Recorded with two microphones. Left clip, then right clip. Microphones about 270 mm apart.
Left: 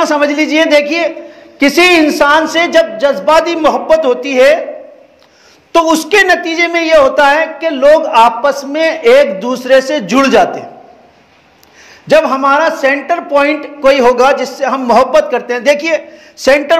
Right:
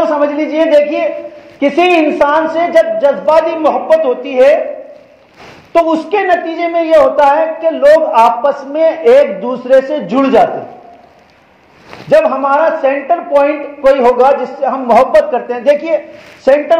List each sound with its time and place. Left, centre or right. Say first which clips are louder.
0.4 s speech: right 1 dB; left
5.7 s speech: left 2 dB; left
12.1 s speech: left 1 dB; left